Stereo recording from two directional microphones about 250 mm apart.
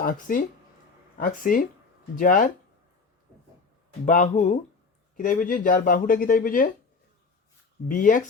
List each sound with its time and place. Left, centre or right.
0.0 s speech: left
4.0 s speech: left
7.9 s speech: left